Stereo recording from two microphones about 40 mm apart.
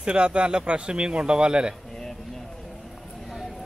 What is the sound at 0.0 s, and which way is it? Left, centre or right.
Speech, right.